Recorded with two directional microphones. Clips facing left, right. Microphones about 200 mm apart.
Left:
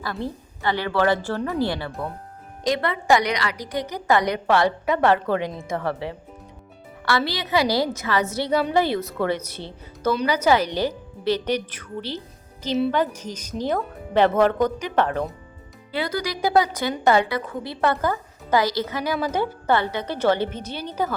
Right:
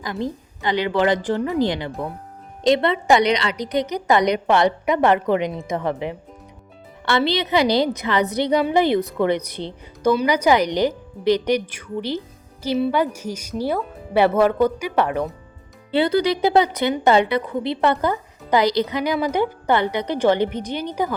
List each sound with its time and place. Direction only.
0.0 s a woman's voice: 15° right (ahead or behind)
15.9 s a woman's voice: 30° right (ahead or behind)